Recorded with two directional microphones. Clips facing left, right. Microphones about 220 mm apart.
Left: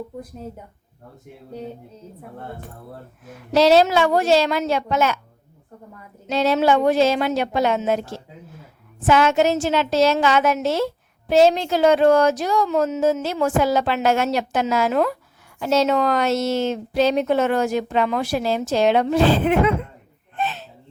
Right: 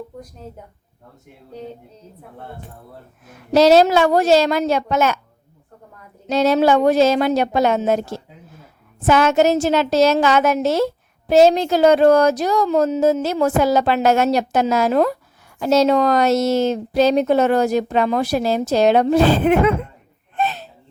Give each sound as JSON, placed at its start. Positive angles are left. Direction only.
{"t": 3.5, "sound": "a woman's voice", "side_deg": -45}
{"t": 6.2, "sound": "a woman's voice", "side_deg": -40}
{"t": 20.3, "sound": "a sound", "side_deg": -40}